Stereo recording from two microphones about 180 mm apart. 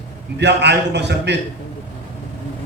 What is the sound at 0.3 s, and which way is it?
A man's voice, 70° right (ahead or behind).